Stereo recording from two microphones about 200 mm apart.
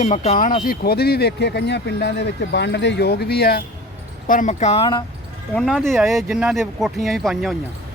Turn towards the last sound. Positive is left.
turn(degrees=0)  # may be behind; listen again after turning